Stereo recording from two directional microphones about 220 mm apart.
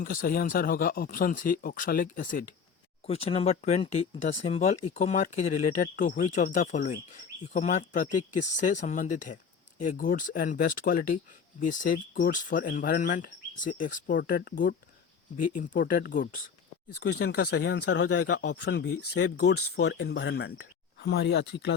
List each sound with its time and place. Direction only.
0.0 s speech: 40° left (ahead or behind)
3.1 s speech: 25° left (ahead or behind); by 18.9 s 50° left (ahead or behind)
19.5 s speech: 75° left (ahead or behind)
20.1 s speech: 50° left (ahead or behind)